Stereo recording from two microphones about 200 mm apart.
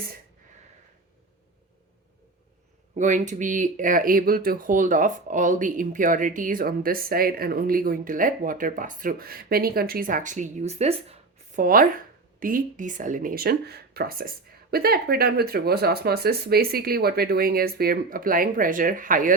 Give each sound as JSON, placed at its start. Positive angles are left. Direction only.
{"t": 2.9, "sound": "speech", "side_deg": -40}